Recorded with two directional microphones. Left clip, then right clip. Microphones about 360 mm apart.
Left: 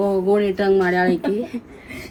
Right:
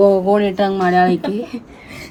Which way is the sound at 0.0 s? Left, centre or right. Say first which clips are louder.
Right 6 dB; right.